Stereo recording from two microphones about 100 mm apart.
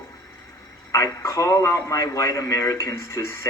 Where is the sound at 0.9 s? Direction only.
30° left (ahead or behind).